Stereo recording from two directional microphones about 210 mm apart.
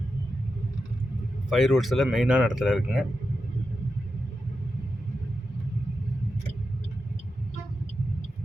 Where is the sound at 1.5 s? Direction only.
Centre (ahead or behind).